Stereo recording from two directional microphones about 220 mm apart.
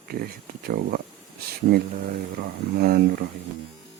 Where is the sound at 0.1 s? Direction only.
40° right (ahead or behind).